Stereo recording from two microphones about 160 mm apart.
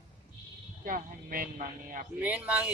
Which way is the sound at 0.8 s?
60° right (ahead or behind).